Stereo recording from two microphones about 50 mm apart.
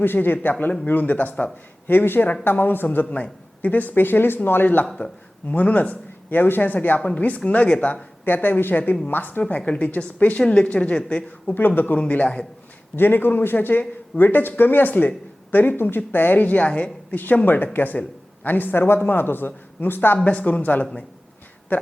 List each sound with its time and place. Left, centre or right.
0.0 s a man's voice: left
8.2 s speech: left
9.6 s a woman's voice: left
11.5 s speech: left
11.9 s a woman's voice: left
13.0 s speech: left
17.2 s a man's voice: left
20.2 s speech: left